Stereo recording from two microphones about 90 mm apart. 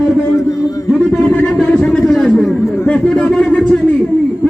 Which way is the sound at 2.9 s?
10° left (ahead or behind).